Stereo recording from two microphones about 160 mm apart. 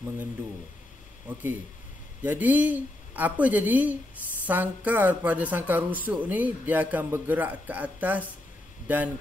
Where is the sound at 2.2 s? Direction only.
10° right (ahead or behind).